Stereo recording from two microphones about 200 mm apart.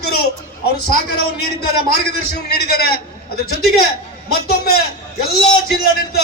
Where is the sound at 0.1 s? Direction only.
50° left (ahead or behind).